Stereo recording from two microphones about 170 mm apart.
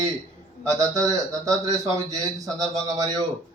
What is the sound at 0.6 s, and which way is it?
A man's voice, 20° right (ahead or behind).